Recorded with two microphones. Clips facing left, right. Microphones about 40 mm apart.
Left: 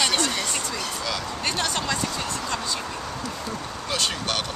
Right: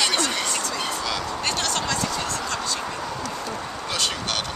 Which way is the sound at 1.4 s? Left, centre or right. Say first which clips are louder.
Even; centre.